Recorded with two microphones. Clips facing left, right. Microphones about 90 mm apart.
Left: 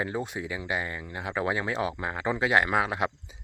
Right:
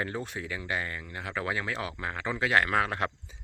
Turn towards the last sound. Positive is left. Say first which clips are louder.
# left 2 dB
turn(degrees=15)  # may be behind; listen again after turning